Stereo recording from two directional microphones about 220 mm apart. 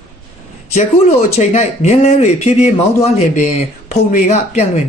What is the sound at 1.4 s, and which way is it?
Speech, 30° left (ahead or behind).